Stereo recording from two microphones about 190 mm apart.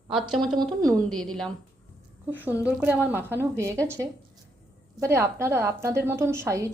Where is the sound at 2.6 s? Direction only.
10° right (ahead or behind).